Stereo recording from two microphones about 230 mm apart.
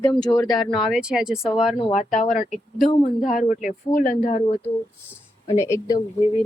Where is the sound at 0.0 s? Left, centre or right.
Centre.